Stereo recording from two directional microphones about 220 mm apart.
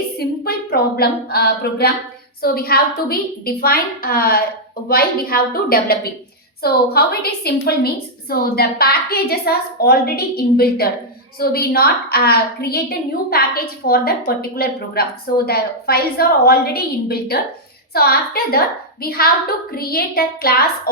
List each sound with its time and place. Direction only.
0.2 s a woman's voice: 45° left (ahead or behind)